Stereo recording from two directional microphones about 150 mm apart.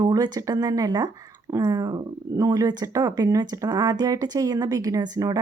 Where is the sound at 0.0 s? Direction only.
25° right (ahead or behind).